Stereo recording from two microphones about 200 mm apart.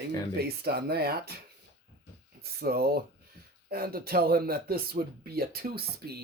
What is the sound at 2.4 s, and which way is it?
Speech, 50° right (ahead or behind).